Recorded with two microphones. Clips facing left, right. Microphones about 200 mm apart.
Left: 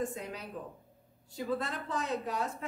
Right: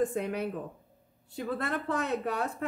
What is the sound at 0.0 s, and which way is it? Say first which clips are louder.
A woman's voice: right 8 dB; 60° right (ahead or behind).